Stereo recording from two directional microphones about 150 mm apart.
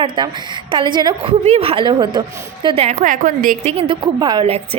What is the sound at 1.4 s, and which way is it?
Speech, 40° right (ahead or behind).